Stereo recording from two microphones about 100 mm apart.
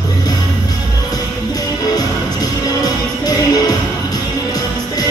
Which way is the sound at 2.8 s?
40° left (ahead or behind).